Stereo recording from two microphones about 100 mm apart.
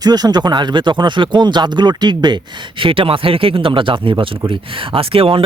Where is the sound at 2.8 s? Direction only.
60° right (ahead or behind).